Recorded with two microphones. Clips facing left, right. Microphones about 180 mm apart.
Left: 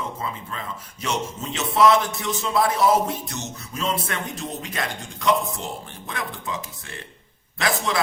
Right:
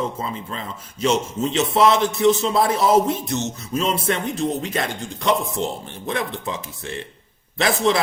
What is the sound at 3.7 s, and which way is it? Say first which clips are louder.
A man's voice: right 5 dB; 25° right (ahead or behind).